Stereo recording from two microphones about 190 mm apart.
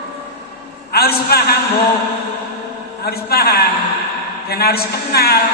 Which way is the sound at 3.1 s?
55° left (ahead or behind).